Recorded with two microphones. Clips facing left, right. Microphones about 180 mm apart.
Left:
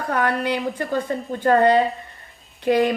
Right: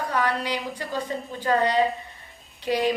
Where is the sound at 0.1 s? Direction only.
55° left (ahead or behind).